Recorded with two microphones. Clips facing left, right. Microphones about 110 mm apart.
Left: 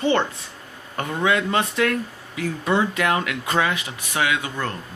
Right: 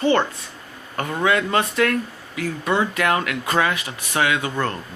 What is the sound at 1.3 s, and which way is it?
Speech, 15° left (ahead or behind).